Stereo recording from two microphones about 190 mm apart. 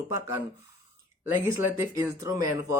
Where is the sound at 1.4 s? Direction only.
10° right (ahead or behind).